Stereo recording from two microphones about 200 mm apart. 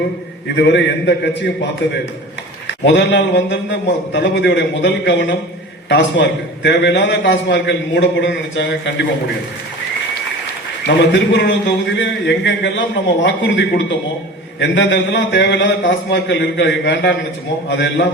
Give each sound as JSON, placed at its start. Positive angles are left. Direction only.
{"t": 0.5, "sound": "a man's voice", "side_deg": 60}
{"t": 10.8, "sound": "a man's voice", "side_deg": 60}